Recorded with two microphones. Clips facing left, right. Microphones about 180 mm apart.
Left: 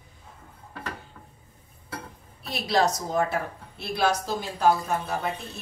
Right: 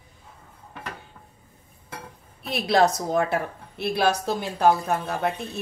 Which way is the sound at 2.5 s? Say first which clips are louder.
Right 4 dB; 55° right (ahead or behind).